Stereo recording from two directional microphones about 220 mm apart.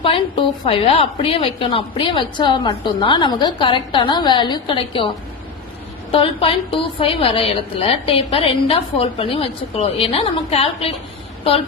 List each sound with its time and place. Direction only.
0.6 s a woman's voice: 25° left (ahead or behind)